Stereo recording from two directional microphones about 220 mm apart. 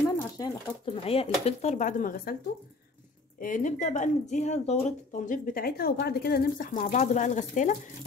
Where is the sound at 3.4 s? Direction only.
35° left (ahead or behind).